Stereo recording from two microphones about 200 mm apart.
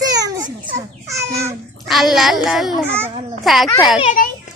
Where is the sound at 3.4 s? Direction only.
Centre (ahead or behind).